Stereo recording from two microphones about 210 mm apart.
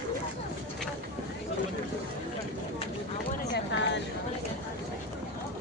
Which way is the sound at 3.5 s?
60° left (ahead or behind).